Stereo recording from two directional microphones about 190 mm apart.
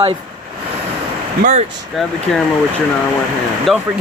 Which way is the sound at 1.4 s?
40° right (ahead or behind).